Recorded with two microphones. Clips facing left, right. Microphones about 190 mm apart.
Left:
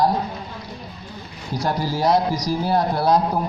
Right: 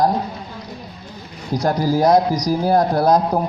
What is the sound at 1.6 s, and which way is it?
A man's voice, 45° right (ahead or behind).